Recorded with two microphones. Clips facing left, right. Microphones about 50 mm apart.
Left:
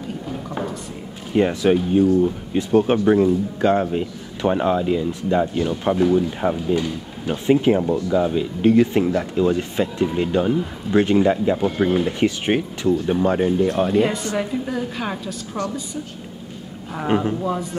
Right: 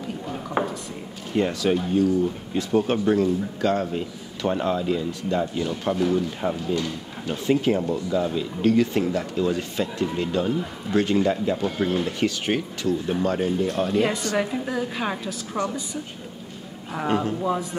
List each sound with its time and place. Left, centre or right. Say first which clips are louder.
0.6 s drawer open or close: right 3 dB; right
1.3 s speech: left 5 dB; left
13.9 s a woman's voice: left 3 dB; centre
15.6 s a woman's voice: even; centre
17.1 s speech: left 4 dB; left
17.4 s a woman's voice: left 1 dB; centre